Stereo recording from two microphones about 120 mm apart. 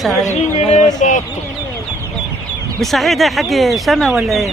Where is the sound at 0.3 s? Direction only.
70° left (ahead or behind).